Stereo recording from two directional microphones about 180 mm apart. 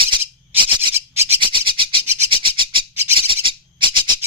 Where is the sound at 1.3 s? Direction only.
30° right (ahead or behind).